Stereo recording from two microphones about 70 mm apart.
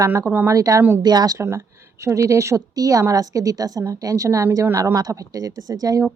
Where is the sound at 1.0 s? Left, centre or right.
Right.